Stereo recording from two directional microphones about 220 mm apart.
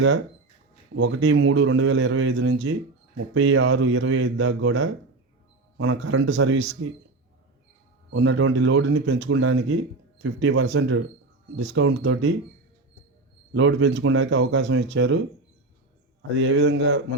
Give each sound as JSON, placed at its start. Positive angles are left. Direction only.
{"t": 1.0, "sound": "a man's voice", "side_deg": -60}
{"t": 5.7, "sound": "a man's voice", "side_deg": -80}
{"t": 8.1, "sound": "a man's voice", "side_deg": -60}
{"t": 9.1, "sound": "a man's voice", "side_deg": -55}
{"t": 13.5, "sound": "a man's voice", "side_deg": -55}
{"t": 16.3, "sound": "a man's voice", "side_deg": -55}